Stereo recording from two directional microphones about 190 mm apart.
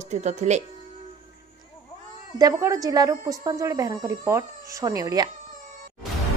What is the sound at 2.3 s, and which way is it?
A woman's voice, 20° right (ahead or behind).